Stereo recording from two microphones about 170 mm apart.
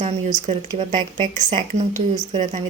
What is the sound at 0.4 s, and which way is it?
Speech, 45° right (ahead or behind).